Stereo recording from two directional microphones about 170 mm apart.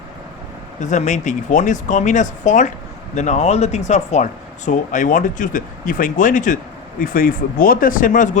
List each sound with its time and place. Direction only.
0.8 s speech: 45° left (ahead or behind)